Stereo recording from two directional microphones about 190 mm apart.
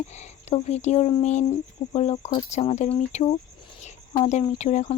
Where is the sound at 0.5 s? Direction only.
35° left (ahead or behind).